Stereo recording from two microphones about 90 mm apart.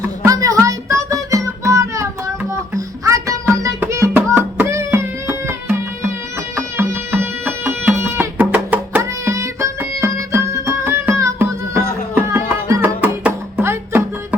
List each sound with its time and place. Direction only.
0.3 s music: 40° right (ahead or behind)
4.1 s music: 20° right (ahead or behind)
4.6 s music: 30° right (ahead or behind)
9.0 s music: 30° right (ahead or behind)
12.8 s music: 20° right (ahead or behind)